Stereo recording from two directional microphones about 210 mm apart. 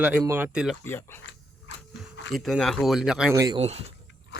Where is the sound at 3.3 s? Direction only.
20° right (ahead or behind).